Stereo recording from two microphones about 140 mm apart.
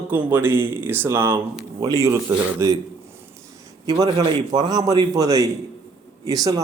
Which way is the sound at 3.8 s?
25° right (ahead or behind).